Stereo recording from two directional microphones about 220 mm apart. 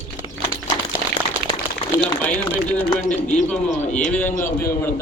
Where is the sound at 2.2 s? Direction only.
5° left (ahead or behind).